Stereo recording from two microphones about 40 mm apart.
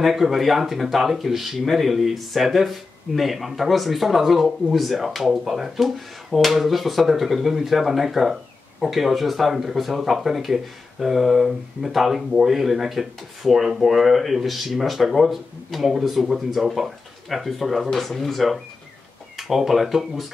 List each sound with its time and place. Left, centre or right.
0.0 s speech: centre